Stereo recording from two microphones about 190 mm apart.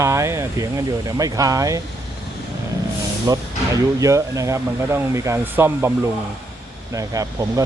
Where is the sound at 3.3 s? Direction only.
20° right (ahead or behind).